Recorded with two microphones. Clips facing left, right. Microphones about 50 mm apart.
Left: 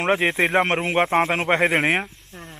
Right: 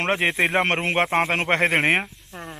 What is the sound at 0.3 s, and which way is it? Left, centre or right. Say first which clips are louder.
Speech: left 1 dB; centre.